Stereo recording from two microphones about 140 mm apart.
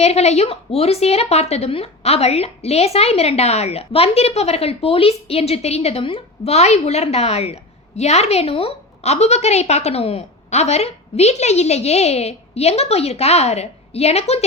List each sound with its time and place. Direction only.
0.0 s a woman's voice: 50° left (ahead or behind)